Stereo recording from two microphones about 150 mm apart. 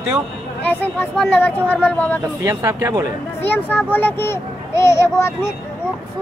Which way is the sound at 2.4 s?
20° right (ahead or behind).